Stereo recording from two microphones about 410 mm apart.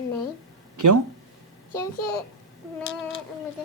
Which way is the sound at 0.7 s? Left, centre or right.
Right.